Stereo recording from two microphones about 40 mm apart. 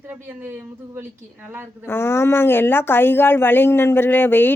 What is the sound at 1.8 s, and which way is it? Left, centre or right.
Speech, left.